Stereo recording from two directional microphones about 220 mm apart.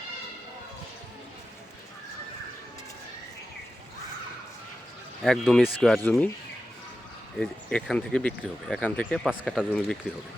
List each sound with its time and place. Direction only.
5.2 s speech: centre (ahead or behind)
7.3 s speech: 5° left (ahead or behind)